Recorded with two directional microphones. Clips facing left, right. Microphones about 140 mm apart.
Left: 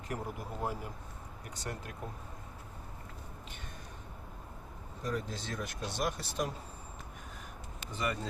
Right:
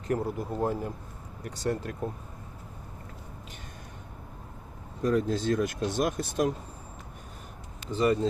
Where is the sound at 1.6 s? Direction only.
35° right (ahead or behind).